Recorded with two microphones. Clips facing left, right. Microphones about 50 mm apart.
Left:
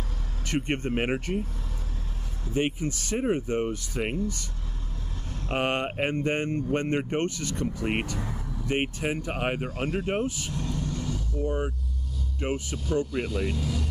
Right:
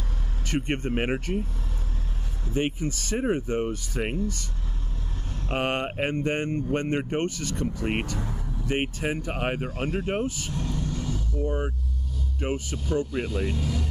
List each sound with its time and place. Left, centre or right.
0.5 s speech: centre
2.8 s speech: centre
5.5 s speech: centre
10.5 s vehicle: right
11.4 s speech: centre
13.3 s speech: centre
13.6 s speech: right